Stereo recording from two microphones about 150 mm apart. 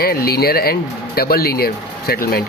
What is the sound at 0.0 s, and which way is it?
Speech, 85° left.